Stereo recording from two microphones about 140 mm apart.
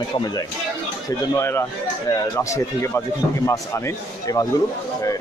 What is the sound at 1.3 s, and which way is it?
A man's voice, 20° left (ahead or behind).